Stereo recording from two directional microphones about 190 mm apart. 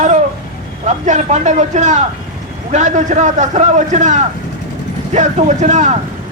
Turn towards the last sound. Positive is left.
turn(degrees=-40)  # may be behind; listen again after turning